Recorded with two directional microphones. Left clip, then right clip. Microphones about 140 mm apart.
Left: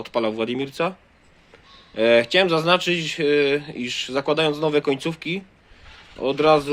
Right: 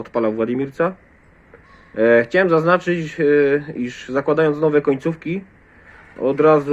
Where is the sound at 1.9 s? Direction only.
15° left (ahead or behind).